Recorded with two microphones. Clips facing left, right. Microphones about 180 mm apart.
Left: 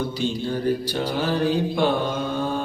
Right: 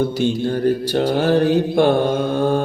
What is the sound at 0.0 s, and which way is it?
Mantra, 50° right (ahead or behind).